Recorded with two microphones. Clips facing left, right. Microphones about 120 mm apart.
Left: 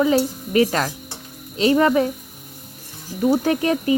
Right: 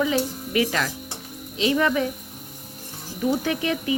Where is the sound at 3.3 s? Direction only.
40° left (ahead or behind).